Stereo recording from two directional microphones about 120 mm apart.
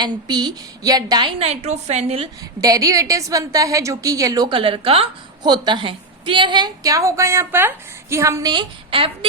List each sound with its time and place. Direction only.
0.0 s a woman's voice: 35° right (ahead or behind)
1.4 s a woman's voice: 60° right (ahead or behind)
2.6 s a woman's voice: 30° right (ahead or behind)
4.4 s a woman's voice: 45° right (ahead or behind)
5.4 s a woman's voice: 35° right (ahead or behind)